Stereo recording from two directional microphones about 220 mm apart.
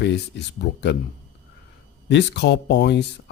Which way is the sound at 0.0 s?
50° left (ahead or behind).